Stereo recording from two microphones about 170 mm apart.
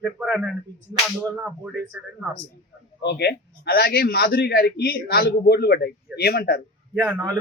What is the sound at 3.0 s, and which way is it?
A man's voice, 75° left (ahead or behind).